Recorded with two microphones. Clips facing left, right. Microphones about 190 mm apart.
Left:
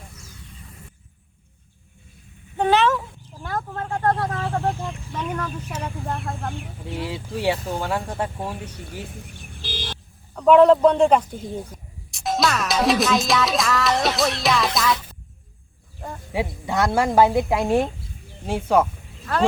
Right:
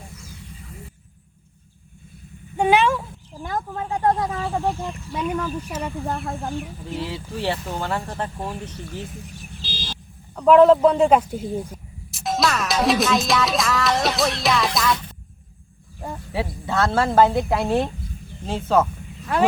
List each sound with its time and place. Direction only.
2.6 s a sound: 10° right (ahead or behind)
3.4 s speech: 15° right (ahead or behind)
7.0 s speech: 10° left (ahead or behind)
9.6 s vehicle: 60° left (ahead or behind)
10.3 s a man's voice: centre (ahead or behind)
12.1 s music: centre (ahead or behind)
16.3 s speech: 15° left (ahead or behind)